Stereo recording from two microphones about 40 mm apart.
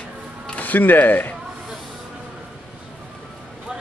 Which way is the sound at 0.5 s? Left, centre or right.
Left.